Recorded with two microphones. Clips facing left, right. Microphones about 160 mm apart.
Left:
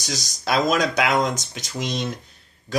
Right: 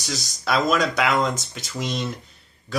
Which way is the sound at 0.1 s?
20° left (ahead or behind).